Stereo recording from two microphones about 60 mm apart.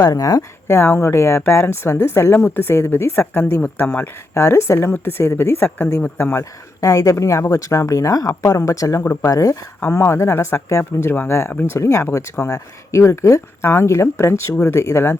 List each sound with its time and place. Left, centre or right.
0.0 s speech: left
0.7 s speech: left
3.2 s speech: left
4.4 s speech: left
6.4 s speech: left
9.9 s speech: left
11.0 s speech: left
11.3 s speech: left